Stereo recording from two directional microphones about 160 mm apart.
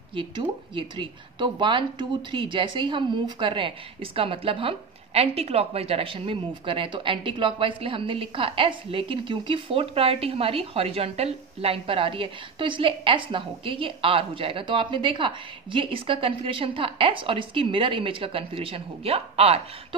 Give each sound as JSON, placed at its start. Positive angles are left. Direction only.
{"t": 0.1, "sound": "speech", "side_deg": -30}